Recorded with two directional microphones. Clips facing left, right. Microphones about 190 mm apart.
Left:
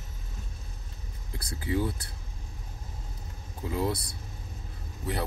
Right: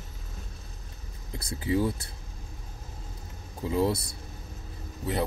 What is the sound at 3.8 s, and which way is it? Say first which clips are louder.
Speech: right 2 dB; 25° right (ahead or behind).